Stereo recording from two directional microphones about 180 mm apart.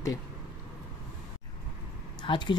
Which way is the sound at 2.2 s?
25° left (ahead or behind).